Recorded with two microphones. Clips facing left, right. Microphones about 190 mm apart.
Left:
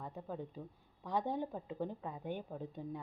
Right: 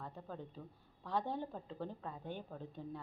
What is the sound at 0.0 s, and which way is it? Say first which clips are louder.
A woman's voice: left 4 dB; 15° left (ahead or behind).